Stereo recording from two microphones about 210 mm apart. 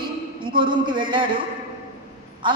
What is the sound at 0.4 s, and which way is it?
Speech, 25° right (ahead or behind).